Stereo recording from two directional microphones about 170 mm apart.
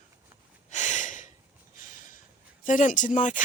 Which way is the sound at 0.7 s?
45° left (ahead or behind).